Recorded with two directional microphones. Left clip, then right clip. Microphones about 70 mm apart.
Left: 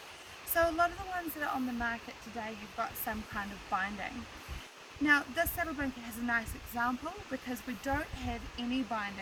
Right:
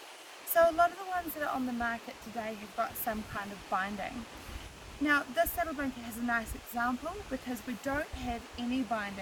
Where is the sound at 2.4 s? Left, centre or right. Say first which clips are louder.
Right 3 dB; right.